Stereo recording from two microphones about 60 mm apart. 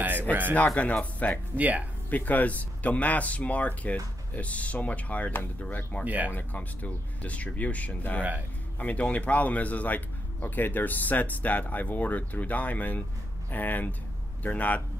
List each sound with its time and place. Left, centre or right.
0.0 s a sound: right
0.6 s speech: left
1.6 s speech: right
2.0 s speech: left
6.0 s speech: right
6.3 s speech: left